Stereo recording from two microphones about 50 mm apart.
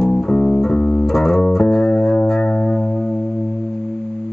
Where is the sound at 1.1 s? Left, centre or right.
Centre.